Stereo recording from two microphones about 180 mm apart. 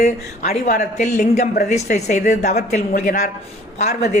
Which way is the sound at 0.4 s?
45° left (ahead or behind).